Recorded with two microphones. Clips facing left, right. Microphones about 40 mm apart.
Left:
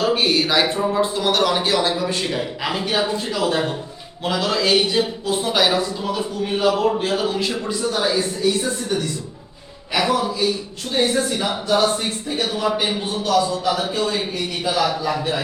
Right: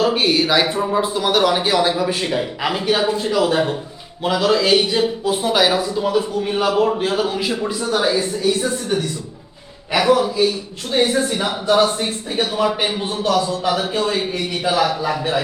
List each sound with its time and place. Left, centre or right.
0.0 s speech: centre
8.4 s speech: centre
14.6 s speech: centre